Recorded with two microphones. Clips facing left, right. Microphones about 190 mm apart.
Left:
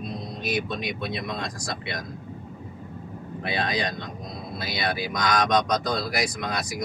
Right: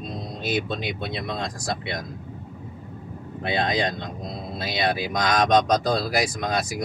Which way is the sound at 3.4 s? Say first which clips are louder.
Right 4 dB; 25° right (ahead or behind).